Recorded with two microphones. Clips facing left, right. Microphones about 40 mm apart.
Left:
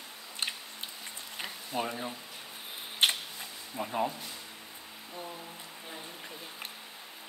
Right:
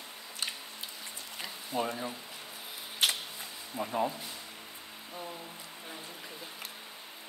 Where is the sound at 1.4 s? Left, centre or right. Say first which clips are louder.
Right 1 dB; centre.